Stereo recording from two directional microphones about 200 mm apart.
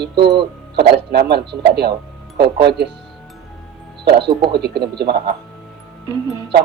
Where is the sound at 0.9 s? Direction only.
55° right (ahead or behind).